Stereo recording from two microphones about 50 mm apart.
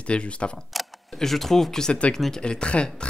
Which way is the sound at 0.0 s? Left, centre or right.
Left.